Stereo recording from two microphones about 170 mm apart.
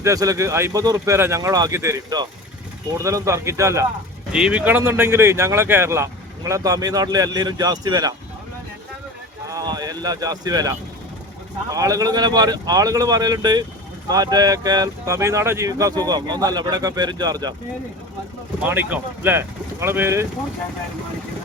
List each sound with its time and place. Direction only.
0.0 s speech: 20° right (ahead or behind)
4.3 s speech: 5° right (ahead or behind); by 8.1 s 20° right (ahead or behind)
9.5 s speech: 20° right (ahead or behind)
18.6 s speech: 10° right (ahead or behind)